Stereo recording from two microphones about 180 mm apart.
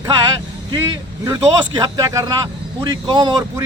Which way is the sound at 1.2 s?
20° right (ahead or behind).